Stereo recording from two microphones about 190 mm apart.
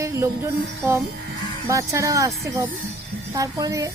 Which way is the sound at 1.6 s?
15° right (ahead or behind).